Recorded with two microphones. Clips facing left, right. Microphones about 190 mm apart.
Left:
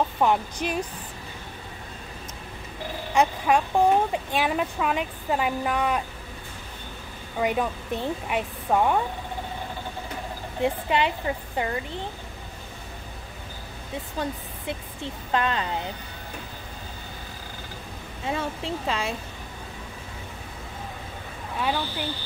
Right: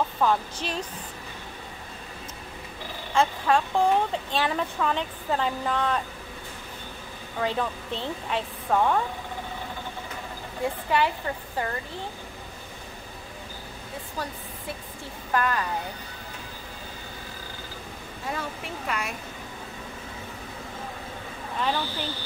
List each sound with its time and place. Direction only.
0.2 s speech: 15° left (ahead or behind)
3.2 s speech: 15° left (ahead or behind)
7.3 s speech: 15° left (ahead or behind)
10.6 s speech: 20° left (ahead or behind)
14.7 s speech: 20° left (ahead or behind)
18.2 s speech: 25° left (ahead or behind)
21.5 s speech: 10° left (ahead or behind)